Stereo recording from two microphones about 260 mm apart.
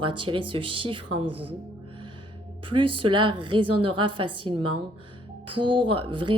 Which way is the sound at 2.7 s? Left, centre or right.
Centre.